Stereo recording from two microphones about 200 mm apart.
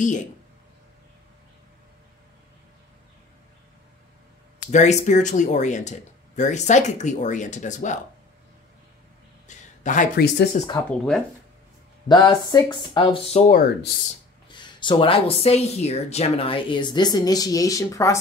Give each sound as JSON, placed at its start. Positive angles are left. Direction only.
{"t": 4.6, "sound": "speech", "side_deg": 35}
{"t": 9.5, "sound": "a sound", "side_deg": 40}
{"t": 10.6, "sound": "speech", "side_deg": 40}
{"t": 10.9, "sound": "speech", "side_deg": 5}
{"t": 12.1, "sound": "speech", "side_deg": 20}
{"t": 14.5, "sound": "speech", "side_deg": 25}